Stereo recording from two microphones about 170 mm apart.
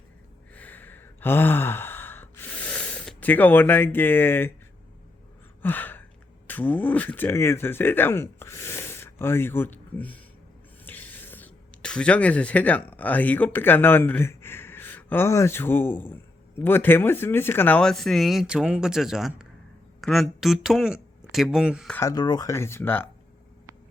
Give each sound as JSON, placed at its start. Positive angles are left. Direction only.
{"t": 0.5, "sound": "sigh", "side_deg": 10}
{"t": 5.6, "sound": "gasp", "side_deg": 10}
{"t": 6.5, "sound": "speech", "side_deg": 10}
{"t": 21.8, "sound": "speech", "side_deg": 10}
{"t": 22.1, "sound": "speech", "side_deg": 25}